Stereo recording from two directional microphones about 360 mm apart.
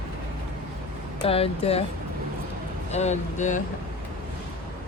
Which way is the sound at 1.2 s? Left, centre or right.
Centre.